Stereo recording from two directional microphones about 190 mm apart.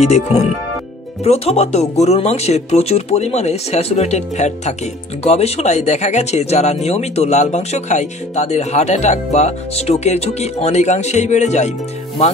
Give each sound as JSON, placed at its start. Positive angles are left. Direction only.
{"t": 0.0, "sound": "speech", "side_deg": 35}